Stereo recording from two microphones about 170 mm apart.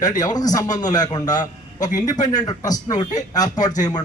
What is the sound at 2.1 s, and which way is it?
Speech, 45° left (ahead or behind).